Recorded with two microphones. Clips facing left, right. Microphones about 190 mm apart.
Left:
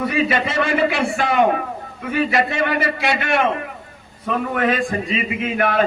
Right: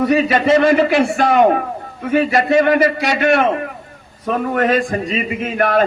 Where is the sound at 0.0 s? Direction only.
45° right (ahead or behind).